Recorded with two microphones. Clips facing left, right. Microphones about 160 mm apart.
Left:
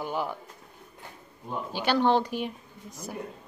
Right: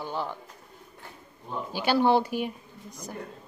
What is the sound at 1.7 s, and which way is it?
Speech, 10° right (ahead or behind).